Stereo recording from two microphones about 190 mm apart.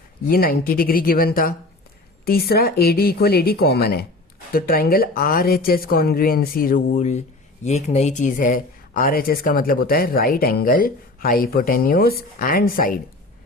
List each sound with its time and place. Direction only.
0.3 s speech: 50° left (ahead or behind)